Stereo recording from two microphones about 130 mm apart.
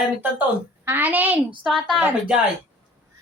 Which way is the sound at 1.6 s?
Centre (ahead or behind).